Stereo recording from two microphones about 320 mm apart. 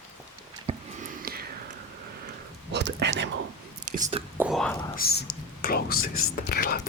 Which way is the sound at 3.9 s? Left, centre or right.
Right.